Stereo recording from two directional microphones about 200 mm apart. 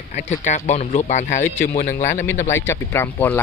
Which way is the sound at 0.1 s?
35° left (ahead or behind).